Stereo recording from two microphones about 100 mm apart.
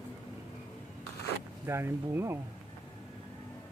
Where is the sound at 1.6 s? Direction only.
25° right (ahead or behind).